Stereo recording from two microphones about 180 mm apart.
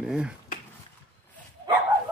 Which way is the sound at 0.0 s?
5° right (ahead or behind).